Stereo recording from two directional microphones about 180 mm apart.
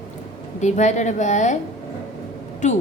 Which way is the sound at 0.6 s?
40° left (ahead or behind).